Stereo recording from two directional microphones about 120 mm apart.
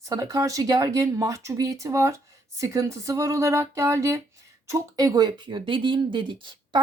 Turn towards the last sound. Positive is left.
turn(degrees=-45)  # may be behind; listen again after turning